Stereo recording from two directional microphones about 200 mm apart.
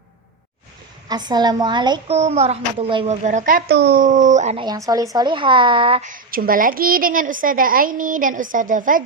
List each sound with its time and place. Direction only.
1.0 s a woman's voice: 20° right (ahead or behind)
3.2 s speech: 40° right (ahead or behind)
4.6 s a woman's voice: 20° right (ahead or behind)
6.1 s a woman's voice: 45° right (ahead or behind)